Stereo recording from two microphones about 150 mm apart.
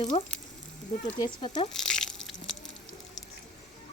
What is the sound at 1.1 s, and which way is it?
Speech, 30° left (ahead or behind).